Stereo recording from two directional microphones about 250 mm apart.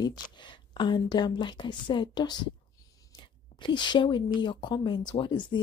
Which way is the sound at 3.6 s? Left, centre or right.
Centre.